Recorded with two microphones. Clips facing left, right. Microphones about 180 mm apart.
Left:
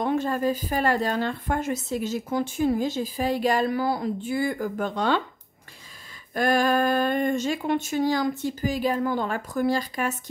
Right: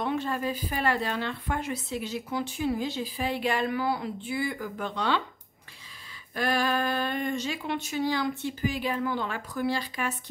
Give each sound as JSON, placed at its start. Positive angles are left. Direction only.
{"t": 0.0, "sound": "speech", "side_deg": 45}
{"t": 6.3, "sound": "speech", "side_deg": 45}